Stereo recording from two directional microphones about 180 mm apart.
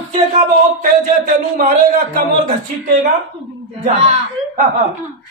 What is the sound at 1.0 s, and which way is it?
Speech, 50° right (ahead or behind).